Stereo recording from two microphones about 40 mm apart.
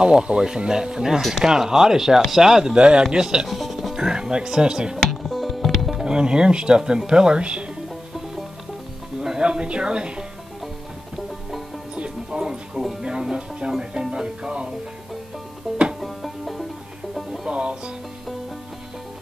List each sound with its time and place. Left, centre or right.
0.0 s speech: right
3.4 s music: centre
3.9 s speech: centre
4.9 s music: centre
6.0 s speech: right
9.2 s music: centre
11.9 s music: right
13.7 s speech: centre
16.0 s music: centre
17.5 s music: right